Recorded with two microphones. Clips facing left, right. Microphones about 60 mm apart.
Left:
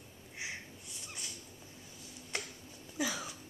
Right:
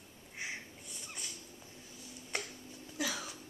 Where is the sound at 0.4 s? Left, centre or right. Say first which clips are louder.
Right 1 dB; centre.